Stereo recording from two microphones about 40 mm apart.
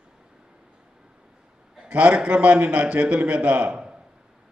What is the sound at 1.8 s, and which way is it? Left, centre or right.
A man's voice, right.